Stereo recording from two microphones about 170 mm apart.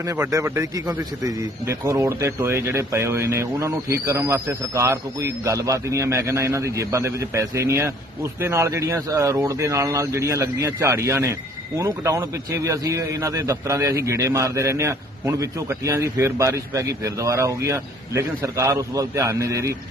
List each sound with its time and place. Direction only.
0.0 s a man's voice: 20° right (ahead or behind)